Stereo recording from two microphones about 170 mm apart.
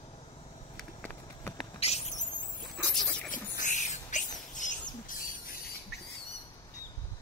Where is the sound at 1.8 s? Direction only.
40° left (ahead or behind).